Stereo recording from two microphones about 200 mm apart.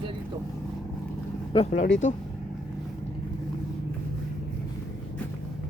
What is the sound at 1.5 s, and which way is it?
Speech, 25° left (ahead or behind).